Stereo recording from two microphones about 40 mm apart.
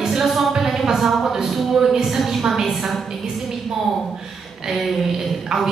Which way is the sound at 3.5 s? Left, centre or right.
Centre.